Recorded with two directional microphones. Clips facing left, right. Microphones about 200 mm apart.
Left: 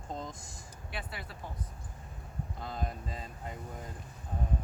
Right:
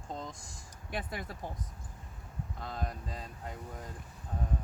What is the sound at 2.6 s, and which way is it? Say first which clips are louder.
Speech: left 1 dB; centre (ahead or behind).